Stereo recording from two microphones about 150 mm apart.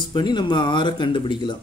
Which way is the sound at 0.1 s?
30° left (ahead or behind).